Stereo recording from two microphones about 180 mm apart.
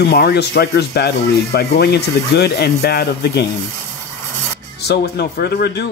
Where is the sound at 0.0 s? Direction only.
65° left (ahead or behind).